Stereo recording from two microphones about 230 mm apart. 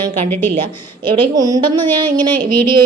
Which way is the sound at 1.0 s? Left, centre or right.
Right.